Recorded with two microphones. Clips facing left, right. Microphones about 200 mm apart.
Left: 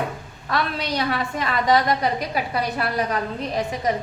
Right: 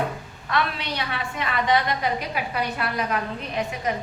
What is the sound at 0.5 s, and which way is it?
A woman's voice, 40° left (ahead or behind).